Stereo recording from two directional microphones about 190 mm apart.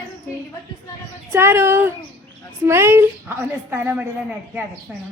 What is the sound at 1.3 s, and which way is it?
A woman's voice, 15° right (ahead or behind).